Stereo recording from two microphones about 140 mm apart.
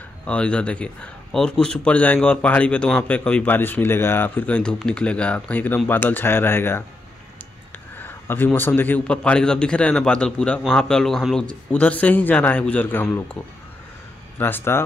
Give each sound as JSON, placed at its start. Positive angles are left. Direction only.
{"t": 0.3, "sound": "speech", "side_deg": 10}
{"t": 8.0, "sound": "speech", "side_deg": 15}
{"t": 14.4, "sound": "speech", "side_deg": 15}